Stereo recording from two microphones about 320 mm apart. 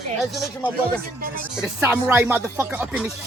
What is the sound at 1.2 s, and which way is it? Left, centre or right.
Speech, right.